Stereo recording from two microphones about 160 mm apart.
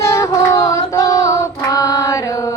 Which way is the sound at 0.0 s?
20° left (ahead or behind).